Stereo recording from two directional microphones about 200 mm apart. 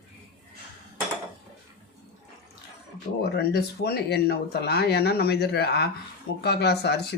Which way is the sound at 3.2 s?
55° left (ahead or behind).